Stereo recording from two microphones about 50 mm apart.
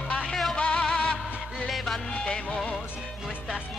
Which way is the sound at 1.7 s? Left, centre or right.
Centre.